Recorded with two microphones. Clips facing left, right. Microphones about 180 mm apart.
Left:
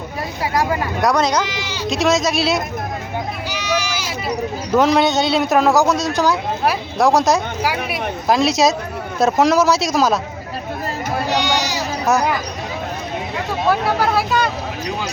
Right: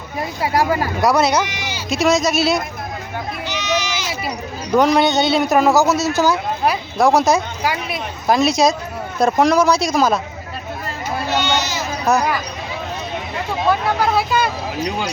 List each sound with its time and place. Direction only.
0.4 s speech: 30° right (ahead or behind)
1.0 s speech: 5° right (ahead or behind)
3.5 s a sound: 10° left (ahead or behind)
4.7 s speech: centre (ahead or behind)
11.3 s a sound: 15° left (ahead or behind)
13.7 s speech: 5° left (ahead or behind)